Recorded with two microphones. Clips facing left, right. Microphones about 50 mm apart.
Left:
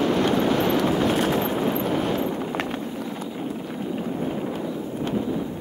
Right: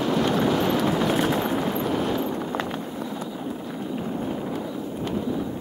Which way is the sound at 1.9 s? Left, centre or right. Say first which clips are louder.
Left 1 dB; left.